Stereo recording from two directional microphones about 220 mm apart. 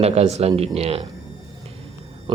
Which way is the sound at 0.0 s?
30° right (ahead or behind).